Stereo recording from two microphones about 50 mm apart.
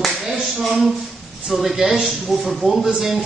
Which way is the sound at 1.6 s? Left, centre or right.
Centre.